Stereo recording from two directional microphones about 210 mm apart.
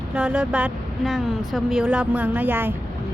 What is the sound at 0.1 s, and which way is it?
Speech, 5° right (ahead or behind).